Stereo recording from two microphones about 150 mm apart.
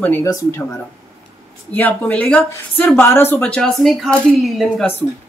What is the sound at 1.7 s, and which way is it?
Speech, 10° left (ahead or behind).